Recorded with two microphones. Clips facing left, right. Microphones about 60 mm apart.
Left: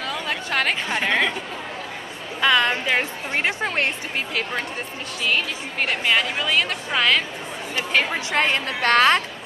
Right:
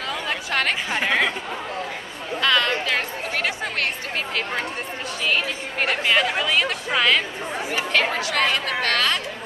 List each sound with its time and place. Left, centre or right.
0.1 s a woman's voice: centre
2.4 s a woman's voice: centre
5.2 s a woman's voice: centre
7.9 s a woman's voice: centre
8.2 s a woman's voice: left